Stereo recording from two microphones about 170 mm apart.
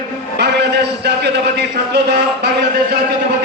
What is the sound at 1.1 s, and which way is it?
Speech, 80° right.